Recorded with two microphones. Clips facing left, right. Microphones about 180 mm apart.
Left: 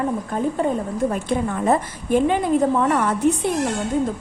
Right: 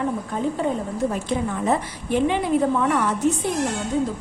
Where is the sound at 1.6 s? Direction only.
45° left (ahead or behind).